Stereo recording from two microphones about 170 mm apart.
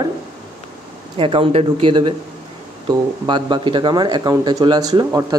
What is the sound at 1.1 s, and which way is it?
Speech, 30° right (ahead or behind).